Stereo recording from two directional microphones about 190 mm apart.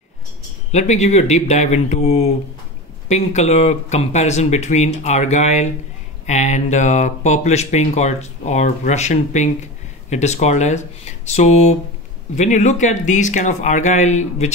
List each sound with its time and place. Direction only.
0.7 s speech: 35° left (ahead or behind)